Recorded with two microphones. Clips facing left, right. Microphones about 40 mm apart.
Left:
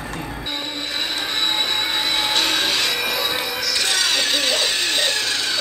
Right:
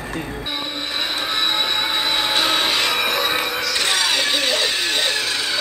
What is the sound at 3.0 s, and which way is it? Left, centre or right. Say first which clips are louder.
Music: right 3 dB; right.